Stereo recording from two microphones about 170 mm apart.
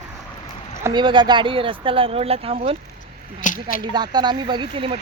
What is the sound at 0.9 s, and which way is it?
Speech, 25° right (ahead or behind).